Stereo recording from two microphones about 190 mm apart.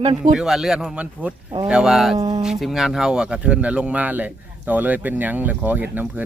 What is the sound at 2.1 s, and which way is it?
Speech, 30° right (ahead or behind).